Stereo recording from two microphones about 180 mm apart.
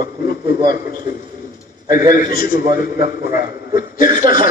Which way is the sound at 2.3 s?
20° right (ahead or behind).